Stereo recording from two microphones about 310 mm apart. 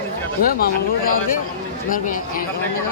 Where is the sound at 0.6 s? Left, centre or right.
Left.